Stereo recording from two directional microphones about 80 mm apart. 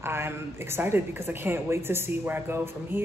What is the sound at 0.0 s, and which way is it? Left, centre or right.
Speech, right.